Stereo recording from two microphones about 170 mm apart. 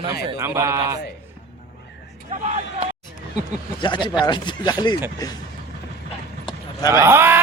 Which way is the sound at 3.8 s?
25° left (ahead or behind).